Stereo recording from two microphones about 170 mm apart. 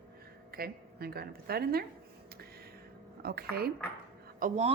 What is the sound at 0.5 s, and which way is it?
A woman's voice, 65° right (ahead or behind).